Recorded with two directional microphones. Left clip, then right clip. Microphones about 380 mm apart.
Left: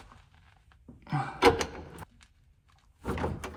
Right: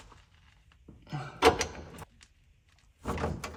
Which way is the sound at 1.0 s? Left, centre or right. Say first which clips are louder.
Left 8 dB; centre.